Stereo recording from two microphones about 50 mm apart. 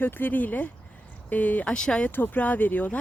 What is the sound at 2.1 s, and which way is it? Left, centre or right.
Speech, left.